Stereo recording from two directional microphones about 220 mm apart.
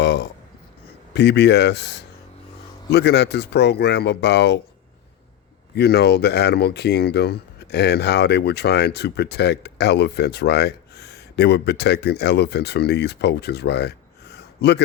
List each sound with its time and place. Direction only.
0.0 s a sound: 50° left (ahead or behind)
1.1 s speech: 50° left (ahead or behind)
5.7 s speech: 50° left (ahead or behind)